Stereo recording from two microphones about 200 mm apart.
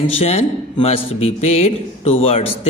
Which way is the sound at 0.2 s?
30° left (ahead or behind).